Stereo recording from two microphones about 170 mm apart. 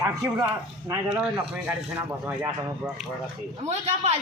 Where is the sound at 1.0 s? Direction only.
5° right (ahead or behind).